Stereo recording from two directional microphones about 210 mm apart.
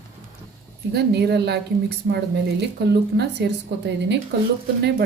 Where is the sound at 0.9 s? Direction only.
50° right (ahead or behind).